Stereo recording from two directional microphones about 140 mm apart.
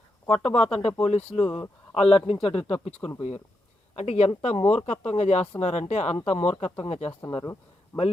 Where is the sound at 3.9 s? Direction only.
50° left (ahead or behind).